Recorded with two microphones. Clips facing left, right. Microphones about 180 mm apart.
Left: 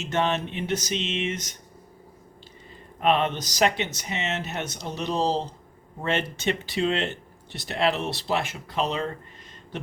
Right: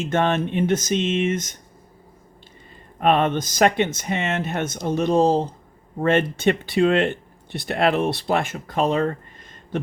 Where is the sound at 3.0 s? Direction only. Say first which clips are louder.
Right 4 dB; 50° right (ahead or behind).